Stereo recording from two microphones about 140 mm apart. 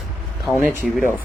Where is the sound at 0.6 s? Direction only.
15° right (ahead or behind).